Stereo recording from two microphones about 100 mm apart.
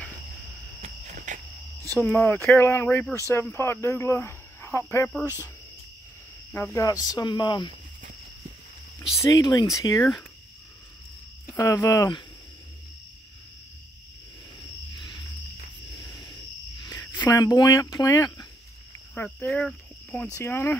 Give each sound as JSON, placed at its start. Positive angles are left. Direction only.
{"t": 2.0, "sound": "speech", "side_deg": 25}
{"t": 5.2, "sound": "speech", "side_deg": 40}
{"t": 6.5, "sound": "speech", "side_deg": 25}
{"t": 9.3, "sound": "speech", "side_deg": 40}
{"t": 11.5, "sound": "speech", "side_deg": 30}
{"t": 15.0, "sound": "a sound", "side_deg": 45}
{"t": 17.0, "sound": "cricket", "side_deg": 15}
{"t": 17.3, "sound": "speech", "side_deg": 40}
{"t": 19.2, "sound": "speech", "side_deg": 20}
{"t": 19.5, "sound": "cricket", "side_deg": 15}
{"t": 20.3, "sound": "speech", "side_deg": 25}